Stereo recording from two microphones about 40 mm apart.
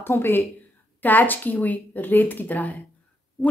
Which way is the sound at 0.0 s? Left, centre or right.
Left.